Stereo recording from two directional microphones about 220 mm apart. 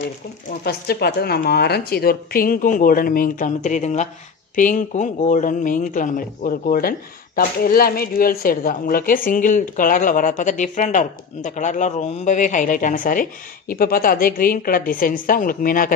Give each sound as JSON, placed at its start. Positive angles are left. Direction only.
{"t": 0.7, "sound": "speech", "side_deg": 45}